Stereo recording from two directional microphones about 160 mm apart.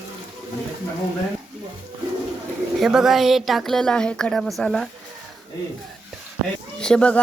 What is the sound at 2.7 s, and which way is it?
Speech, centre (ahead or behind).